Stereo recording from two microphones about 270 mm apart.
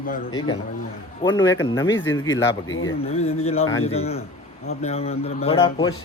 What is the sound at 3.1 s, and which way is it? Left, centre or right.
A man's voice, left.